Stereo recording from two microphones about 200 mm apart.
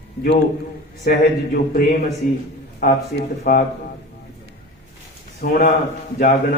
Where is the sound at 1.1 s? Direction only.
50° left (ahead or behind).